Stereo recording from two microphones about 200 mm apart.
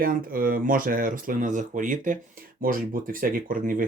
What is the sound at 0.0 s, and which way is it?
Speech, 45° right (ahead or behind).